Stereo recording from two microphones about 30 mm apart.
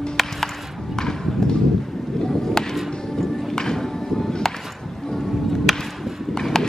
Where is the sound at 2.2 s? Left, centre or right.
Centre.